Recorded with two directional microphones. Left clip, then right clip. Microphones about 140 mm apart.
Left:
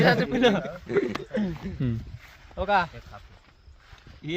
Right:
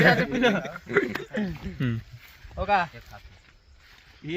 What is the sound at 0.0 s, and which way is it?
Speech, 65° left (ahead or behind).